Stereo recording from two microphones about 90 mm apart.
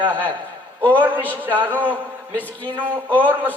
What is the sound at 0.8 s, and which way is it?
A man's voice, 20° right (ahead or behind).